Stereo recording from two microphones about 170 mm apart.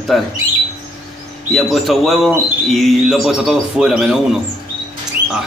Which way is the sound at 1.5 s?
Centre (ahead or behind).